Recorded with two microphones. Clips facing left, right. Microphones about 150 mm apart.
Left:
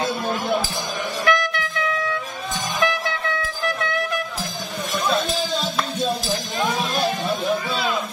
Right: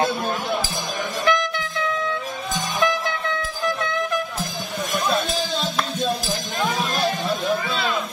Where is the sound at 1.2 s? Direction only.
20° right (ahead or behind).